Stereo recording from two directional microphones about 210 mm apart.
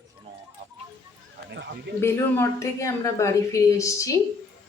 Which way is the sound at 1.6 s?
55° right (ahead or behind).